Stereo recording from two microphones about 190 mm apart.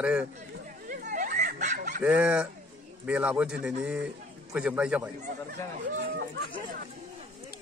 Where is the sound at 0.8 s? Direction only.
45° right (ahead or behind).